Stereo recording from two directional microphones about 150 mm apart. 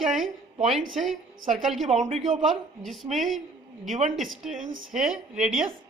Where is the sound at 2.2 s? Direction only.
Centre (ahead or behind).